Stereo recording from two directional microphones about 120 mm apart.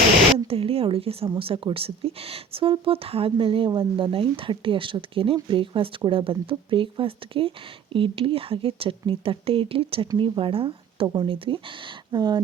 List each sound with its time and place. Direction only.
0.3 s speech: 50° right (ahead or behind)